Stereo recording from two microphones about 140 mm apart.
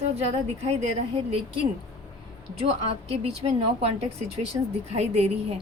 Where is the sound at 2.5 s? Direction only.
50° right (ahead or behind).